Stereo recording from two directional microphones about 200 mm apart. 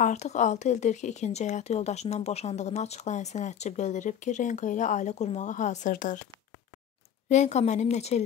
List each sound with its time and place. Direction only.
0.0 s speech: 35° left (ahead or behind)
7.2 s speech: 35° left (ahead or behind)